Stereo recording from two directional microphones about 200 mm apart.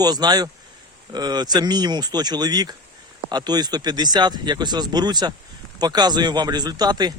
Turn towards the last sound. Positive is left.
turn(degrees=-20)  # may be behind; listen again after turning